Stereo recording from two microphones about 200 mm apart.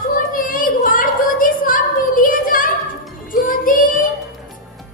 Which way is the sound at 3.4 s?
45° left (ahead or behind).